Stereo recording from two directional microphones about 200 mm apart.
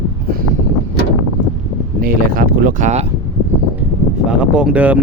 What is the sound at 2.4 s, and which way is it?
Speech, 40° right (ahead or behind).